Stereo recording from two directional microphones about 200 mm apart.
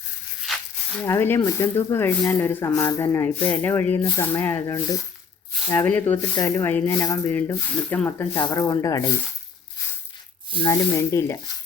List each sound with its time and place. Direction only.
0.4 s a sound: centre (ahead or behind)
1.0 s speech: 10° left (ahead or behind)
8.3 s speech: 20° left (ahead or behind)
10.6 s speech: 15° left (ahead or behind)